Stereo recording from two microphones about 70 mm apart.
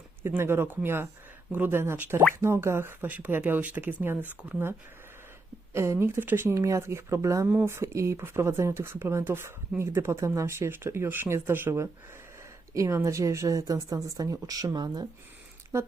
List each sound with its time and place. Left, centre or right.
0.2 s speech: right
5.7 s speech: right
6.5 s a woman's voice: right
12.7 s a woman's voice: right